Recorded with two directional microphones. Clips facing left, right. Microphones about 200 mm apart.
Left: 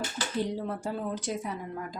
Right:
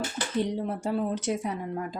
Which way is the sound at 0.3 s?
20° right (ahead or behind).